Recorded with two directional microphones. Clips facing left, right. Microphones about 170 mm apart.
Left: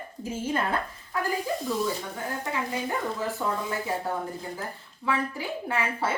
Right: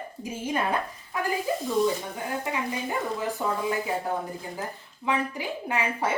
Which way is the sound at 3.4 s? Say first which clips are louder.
Even; 20° right (ahead or behind).